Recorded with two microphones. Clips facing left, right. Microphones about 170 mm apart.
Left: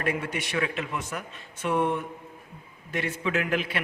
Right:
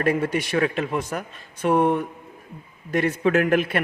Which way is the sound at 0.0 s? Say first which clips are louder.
Right 7 dB; 40° right (ahead or behind).